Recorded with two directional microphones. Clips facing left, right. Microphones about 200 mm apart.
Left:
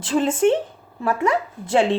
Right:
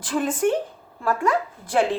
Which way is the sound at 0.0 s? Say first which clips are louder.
Left 4 dB; 25° left (ahead or behind).